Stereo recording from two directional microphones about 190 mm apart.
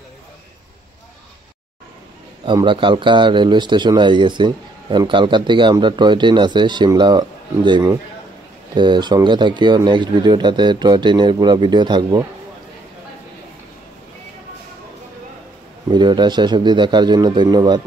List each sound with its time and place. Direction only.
2.4 s speech: 25° right (ahead or behind)
15.9 s speech: 25° right (ahead or behind)